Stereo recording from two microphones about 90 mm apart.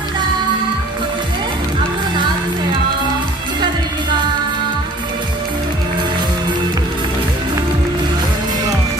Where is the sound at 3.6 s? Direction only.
55° right (ahead or behind).